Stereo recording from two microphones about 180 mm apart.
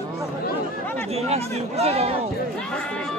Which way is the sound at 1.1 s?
35° right (ahead or behind).